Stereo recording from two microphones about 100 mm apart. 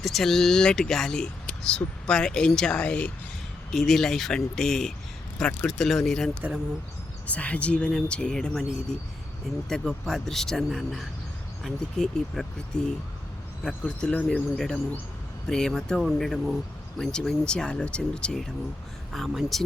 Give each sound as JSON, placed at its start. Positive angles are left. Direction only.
{"t": 0.0, "sound": "speech", "side_deg": 0}